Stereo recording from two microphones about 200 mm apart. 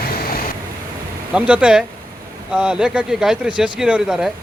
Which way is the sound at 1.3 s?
5° right (ahead or behind).